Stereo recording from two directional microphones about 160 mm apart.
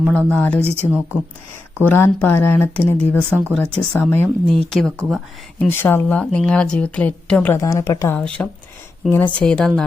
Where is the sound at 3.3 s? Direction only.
15° right (ahead or behind).